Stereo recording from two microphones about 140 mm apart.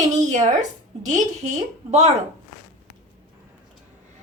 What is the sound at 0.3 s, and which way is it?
Speech, 55° right (ahead or behind).